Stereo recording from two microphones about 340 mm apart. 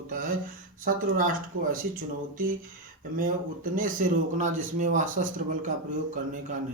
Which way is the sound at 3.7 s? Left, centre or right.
Right.